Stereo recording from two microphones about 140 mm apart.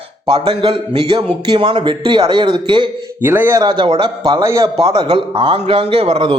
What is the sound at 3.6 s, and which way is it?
A man's voice, 30° right (ahead or behind).